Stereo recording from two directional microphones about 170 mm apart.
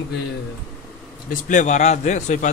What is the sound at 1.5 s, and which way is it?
Speech, 45° left (ahead or behind).